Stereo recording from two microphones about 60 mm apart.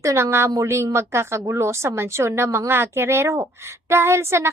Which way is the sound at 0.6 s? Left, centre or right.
Right.